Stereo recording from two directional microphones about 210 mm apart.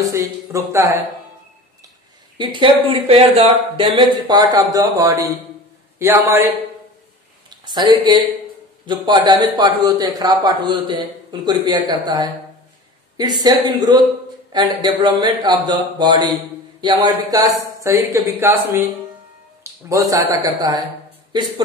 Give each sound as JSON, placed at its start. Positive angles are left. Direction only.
{"t": 0.0, "sound": "speech", "side_deg": -15}
{"t": 2.3, "sound": "speech", "side_deg": -25}
{"t": 7.4, "sound": "speech", "side_deg": -20}